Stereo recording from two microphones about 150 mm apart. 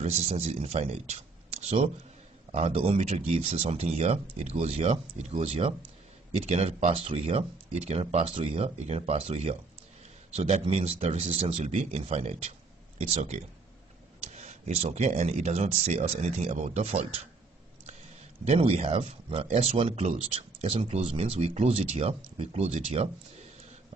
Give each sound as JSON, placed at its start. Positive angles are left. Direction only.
{"t": 0.0, "sound": "speech", "side_deg": -45}
{"t": 18.4, "sound": "speech", "side_deg": -45}